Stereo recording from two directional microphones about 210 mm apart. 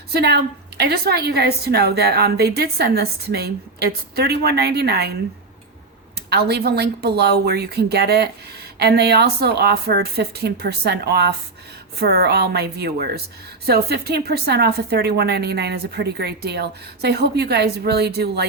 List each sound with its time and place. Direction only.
0.1 s a woman's voice: 50° right (ahead or behind)
6.1 s a woman's voice: 50° right (ahead or behind)